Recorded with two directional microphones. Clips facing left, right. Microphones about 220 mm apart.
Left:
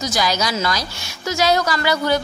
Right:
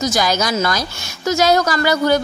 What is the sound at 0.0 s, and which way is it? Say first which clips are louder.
A woman's voice: right 3 dB; 45° right (ahead or behind).